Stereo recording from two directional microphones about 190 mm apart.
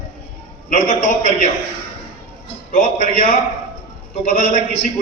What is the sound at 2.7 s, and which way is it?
A man's voice, 40° left (ahead or behind).